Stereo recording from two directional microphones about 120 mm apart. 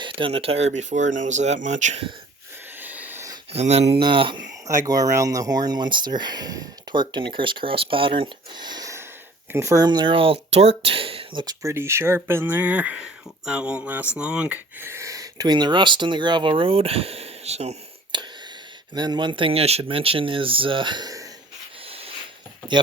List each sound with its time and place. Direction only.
0.0 s speech: 50° right (ahead or behind); by 2.0 s 75° right (ahead or behind)
2.7 s a sound: 15° right (ahead or behind)
3.5 s speech: 60° right (ahead or behind)
4.0 s speech: 45° right (ahead or behind)
4.6 s speech: 30° right (ahead or behind); by 11.4 s 50° right (ahead or behind)
11.4 s speech: 25° right (ahead or behind); by 17.7 s 65° right (ahead or behind)
18.1 s whispering: 40° right (ahead or behind)
18.9 s speech: 35° right (ahead or behind)
21.8 s dog: 55° right (ahead or behind)